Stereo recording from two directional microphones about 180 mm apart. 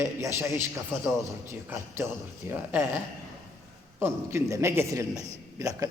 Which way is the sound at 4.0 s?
15° right (ahead or behind).